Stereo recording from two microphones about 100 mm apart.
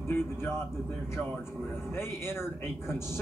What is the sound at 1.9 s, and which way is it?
Speech, 25° left (ahead or behind).